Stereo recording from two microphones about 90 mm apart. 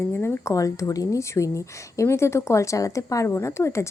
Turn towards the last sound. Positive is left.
turn(degrees=30)  # may be behind; listen again after turning